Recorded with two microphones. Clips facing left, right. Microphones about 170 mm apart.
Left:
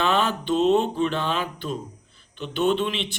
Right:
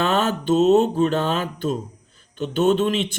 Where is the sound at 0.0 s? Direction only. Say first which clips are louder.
Right 2 dB; 45° right (ahead or behind).